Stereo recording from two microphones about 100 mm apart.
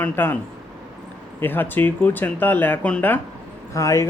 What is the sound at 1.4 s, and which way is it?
Speech, 20° left (ahead or behind).